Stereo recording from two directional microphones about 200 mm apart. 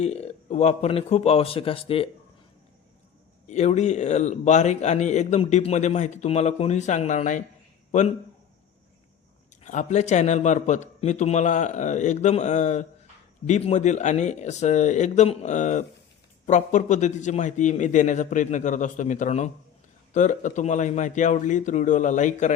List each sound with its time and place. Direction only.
0.0 s speech: 35° left (ahead or behind)
3.4 s speech: 35° left (ahead or behind)
9.6 s speech: 35° left (ahead or behind)